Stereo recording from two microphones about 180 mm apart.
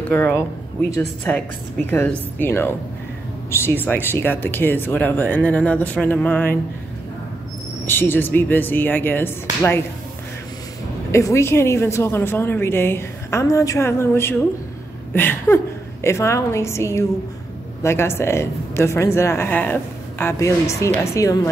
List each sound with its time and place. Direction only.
0.1 s a woman's voice: 10° left (ahead or behind)
7.8 s a woman's voice: 10° left (ahead or behind)
11.1 s a woman's voice: 15° left (ahead or behind)